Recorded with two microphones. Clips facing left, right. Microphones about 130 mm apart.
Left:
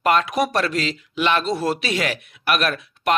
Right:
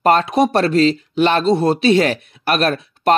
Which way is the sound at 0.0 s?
30° right (ahead or behind).